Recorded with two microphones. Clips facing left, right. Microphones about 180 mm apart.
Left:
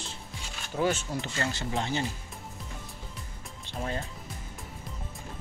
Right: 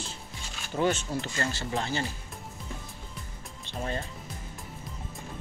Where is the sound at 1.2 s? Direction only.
20° left (ahead or behind).